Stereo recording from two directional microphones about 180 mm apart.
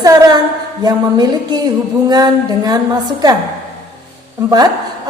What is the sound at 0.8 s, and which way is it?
Speech, 20° right (ahead or behind).